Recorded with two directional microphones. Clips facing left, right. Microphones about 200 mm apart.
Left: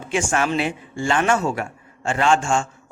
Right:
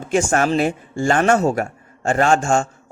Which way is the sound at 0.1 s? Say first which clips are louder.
Right 4 dB; 40° right (ahead or behind).